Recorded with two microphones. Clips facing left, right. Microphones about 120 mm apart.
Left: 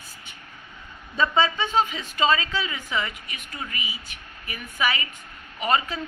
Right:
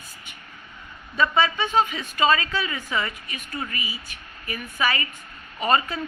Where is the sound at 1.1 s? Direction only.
25° left (ahead or behind).